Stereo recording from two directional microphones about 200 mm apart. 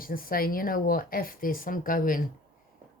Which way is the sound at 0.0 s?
45° left (ahead or behind).